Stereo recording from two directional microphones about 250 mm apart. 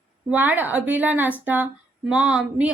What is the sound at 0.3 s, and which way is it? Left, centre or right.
A woman's voice, centre.